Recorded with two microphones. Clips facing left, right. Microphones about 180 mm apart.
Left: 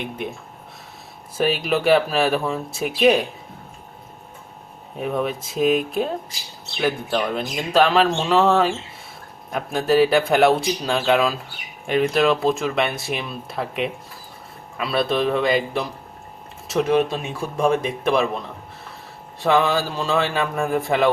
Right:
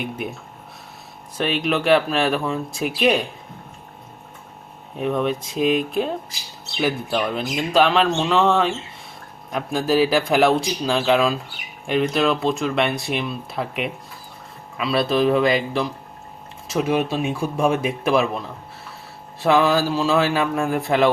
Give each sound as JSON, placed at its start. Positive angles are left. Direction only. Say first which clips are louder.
{"t": 1.4, "sound": "speech", "louder": "left 1 dB", "side_deg": 5}
{"t": 4.9, "sound": "speech", "louder": "right 2 dB", "side_deg": 5}
{"t": 19.4, "sound": "speech", "louder": "right 2 dB", "side_deg": 0}